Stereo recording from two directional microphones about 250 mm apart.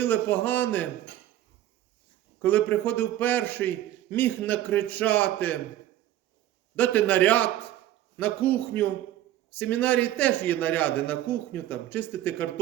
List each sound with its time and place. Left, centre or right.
0.0 s a man's voice: centre
2.4 s a man's voice: centre
6.7 s a man's voice: centre